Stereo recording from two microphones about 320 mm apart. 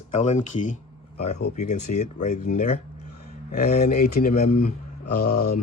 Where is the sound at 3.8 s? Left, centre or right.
Left.